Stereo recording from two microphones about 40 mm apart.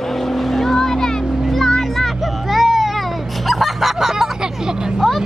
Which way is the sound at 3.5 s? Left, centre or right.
Centre.